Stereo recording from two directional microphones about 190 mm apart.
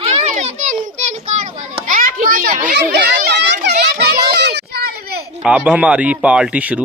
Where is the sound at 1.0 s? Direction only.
35° right (ahead or behind).